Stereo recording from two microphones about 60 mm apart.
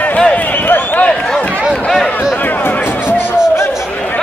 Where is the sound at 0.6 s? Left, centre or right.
Left.